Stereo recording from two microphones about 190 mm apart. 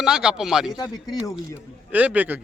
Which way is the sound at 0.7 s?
20° left (ahead or behind).